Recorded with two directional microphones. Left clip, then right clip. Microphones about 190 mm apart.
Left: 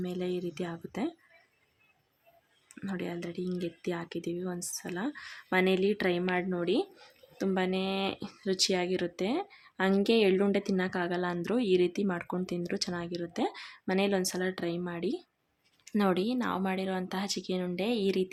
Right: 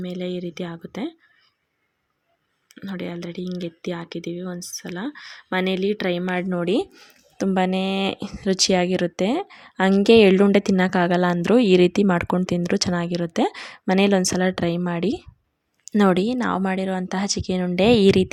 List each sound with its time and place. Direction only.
0.0 s speech: 20° right (ahead or behind)
2.8 s speech: 15° right (ahead or behind); by 18.3 s 50° right (ahead or behind)